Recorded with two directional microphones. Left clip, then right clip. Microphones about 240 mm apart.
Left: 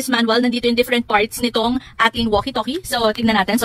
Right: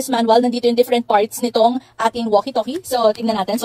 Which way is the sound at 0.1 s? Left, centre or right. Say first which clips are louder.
Right 3 dB; centre.